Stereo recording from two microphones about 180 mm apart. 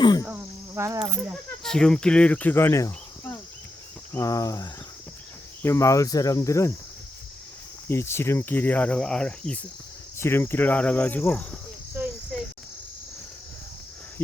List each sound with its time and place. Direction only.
0.0 s insect: 20° left (ahead or behind)
0.3 s insect: 15° right (ahead or behind)
1.6 s speech: 5° left (ahead or behind)
4.1 s cricket: 20° left (ahead or behind)
7.9 s cricket: 15° left (ahead or behind)
12.0 s cricket: 10° right (ahead or behind)